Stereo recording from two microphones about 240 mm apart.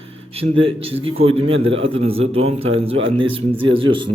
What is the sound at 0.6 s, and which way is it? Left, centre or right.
A man's voice, right.